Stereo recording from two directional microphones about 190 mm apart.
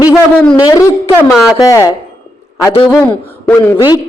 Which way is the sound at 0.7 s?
15° left (ahead or behind).